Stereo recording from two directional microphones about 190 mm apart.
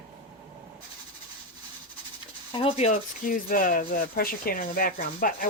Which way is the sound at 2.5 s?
30° left (ahead or behind).